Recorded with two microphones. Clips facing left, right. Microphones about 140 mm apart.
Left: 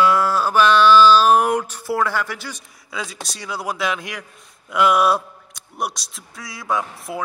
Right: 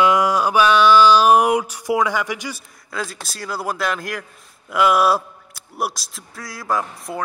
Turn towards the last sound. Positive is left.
turn(degrees=0)  # may be behind; listen again after turning